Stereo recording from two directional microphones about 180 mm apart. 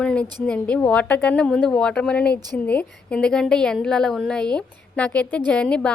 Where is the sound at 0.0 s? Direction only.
5° left (ahead or behind).